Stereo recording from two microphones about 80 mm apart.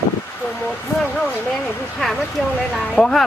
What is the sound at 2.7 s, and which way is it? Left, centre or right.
Speech, centre.